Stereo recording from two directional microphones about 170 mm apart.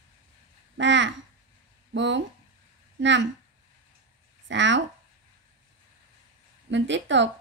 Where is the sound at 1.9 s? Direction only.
90° right.